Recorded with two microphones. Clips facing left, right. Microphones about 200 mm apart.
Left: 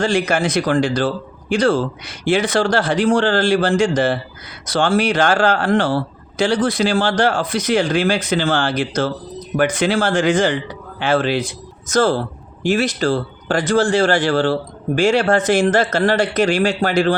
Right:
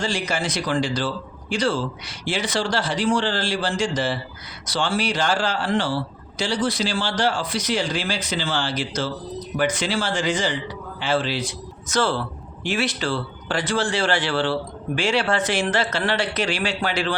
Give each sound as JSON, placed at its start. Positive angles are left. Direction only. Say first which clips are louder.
{"t": 0.0, "sound": "a man's voice", "louder": "left 8 dB", "side_deg": 55}